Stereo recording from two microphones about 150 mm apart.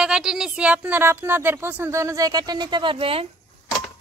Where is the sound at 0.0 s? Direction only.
5° right (ahead or behind); by 3.3 s 40° right (ahead or behind).